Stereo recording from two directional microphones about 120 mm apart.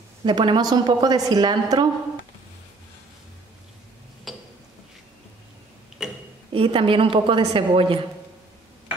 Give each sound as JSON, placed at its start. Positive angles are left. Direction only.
{"t": 0.2, "sound": "a woman's voice", "side_deg": -40}
{"t": 4.3, "sound": "a sound", "side_deg": 0}
{"t": 6.0, "sound": "tick-tock", "side_deg": -5}
{"t": 6.5, "sound": "a woman's voice", "side_deg": -50}